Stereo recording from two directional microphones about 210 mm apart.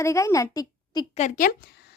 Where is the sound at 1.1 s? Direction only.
40° left (ahead or behind).